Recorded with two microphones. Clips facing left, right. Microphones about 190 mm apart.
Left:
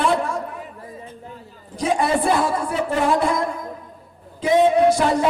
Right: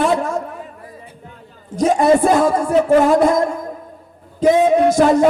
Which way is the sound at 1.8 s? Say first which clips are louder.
Right 7 dB; 45° right (ahead or behind).